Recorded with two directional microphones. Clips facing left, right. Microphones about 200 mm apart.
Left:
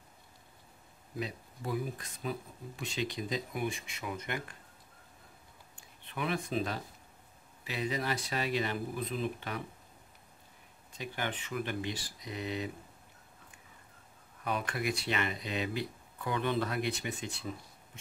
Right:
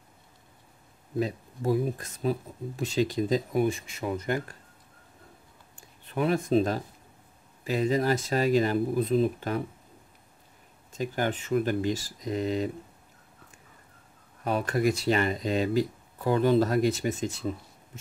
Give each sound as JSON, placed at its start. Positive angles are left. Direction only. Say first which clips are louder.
{"t": 1.2, "sound": "speech", "louder": "right 10 dB", "side_deg": -40}
{"t": 6.0, "sound": "speech", "louder": "right 9 dB", "side_deg": -40}
{"t": 10.9, "sound": "speech", "louder": "right 9 dB", "side_deg": -45}
{"t": 14.4, "sound": "speech", "louder": "right 9 dB", "side_deg": -35}